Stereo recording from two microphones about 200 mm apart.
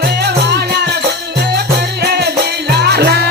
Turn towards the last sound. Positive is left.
turn(degrees=-55)  # may be behind; listen again after turning